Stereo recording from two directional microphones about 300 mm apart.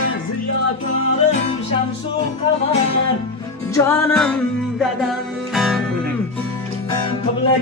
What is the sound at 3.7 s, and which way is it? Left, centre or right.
Music, centre.